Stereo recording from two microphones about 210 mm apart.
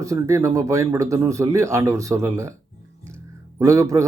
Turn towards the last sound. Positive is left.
turn(degrees=-15)  # may be behind; listen again after turning